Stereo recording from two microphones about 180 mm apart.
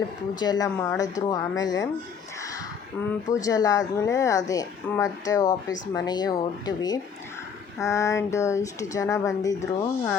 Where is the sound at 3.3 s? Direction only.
20° left (ahead or behind).